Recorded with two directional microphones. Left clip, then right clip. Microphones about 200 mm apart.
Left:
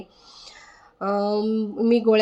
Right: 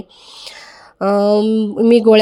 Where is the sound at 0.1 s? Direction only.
40° right (ahead or behind).